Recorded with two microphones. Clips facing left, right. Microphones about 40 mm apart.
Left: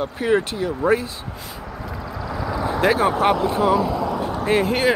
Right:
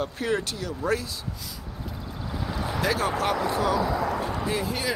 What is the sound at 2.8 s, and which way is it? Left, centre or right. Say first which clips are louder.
Speech: left 8 dB; left.